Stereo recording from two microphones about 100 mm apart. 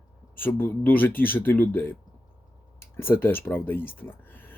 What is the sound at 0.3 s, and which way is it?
Speech, 20° left (ahead or behind).